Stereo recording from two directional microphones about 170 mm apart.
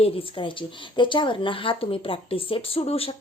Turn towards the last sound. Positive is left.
turn(degrees=35)  # may be behind; listen again after turning